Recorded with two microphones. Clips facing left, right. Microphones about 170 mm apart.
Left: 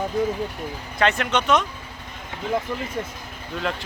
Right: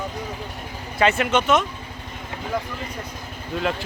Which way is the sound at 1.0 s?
5° right (ahead or behind).